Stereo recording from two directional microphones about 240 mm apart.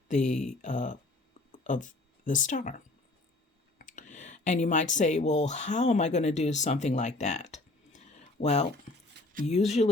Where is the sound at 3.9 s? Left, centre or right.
Left.